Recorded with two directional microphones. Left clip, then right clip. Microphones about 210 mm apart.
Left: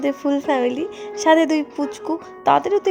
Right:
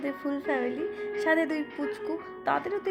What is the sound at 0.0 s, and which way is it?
Speech, 35° left (ahead or behind).